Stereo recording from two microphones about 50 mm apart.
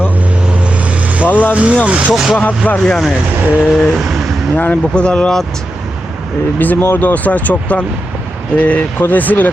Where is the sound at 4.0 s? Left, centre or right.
Centre.